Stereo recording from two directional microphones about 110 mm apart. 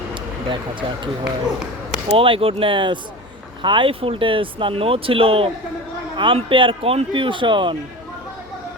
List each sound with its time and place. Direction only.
0.1 s speech: 45° right (ahead or behind)